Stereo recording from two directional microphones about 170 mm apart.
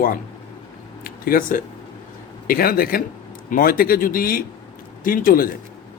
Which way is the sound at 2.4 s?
60° left (ahead or behind).